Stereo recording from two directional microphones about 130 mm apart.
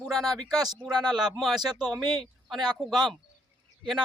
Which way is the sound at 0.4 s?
30° right (ahead or behind).